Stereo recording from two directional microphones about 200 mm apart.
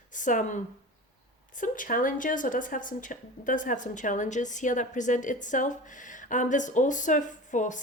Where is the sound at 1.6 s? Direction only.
40° left (ahead or behind).